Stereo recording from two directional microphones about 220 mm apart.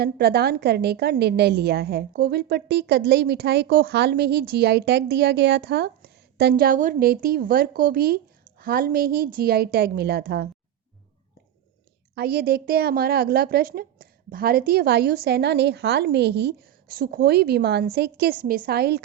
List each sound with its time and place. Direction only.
0.0 s a woman's voice: 45° right (ahead or behind)
12.1 s a woman's voice: 45° right (ahead or behind)